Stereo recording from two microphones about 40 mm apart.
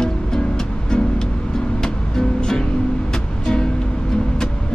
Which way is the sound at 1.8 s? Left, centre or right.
Centre.